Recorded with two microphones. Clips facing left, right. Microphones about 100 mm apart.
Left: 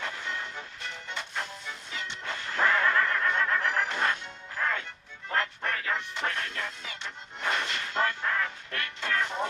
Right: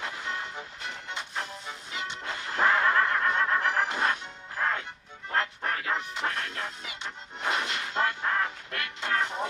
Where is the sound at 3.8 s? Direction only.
10° right (ahead or behind).